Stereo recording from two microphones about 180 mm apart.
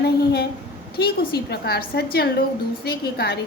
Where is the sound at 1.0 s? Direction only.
60° left (ahead or behind).